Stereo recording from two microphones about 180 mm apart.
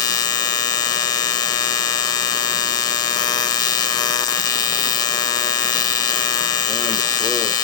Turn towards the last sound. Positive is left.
turn(degrees=20)  # may be behind; listen again after turning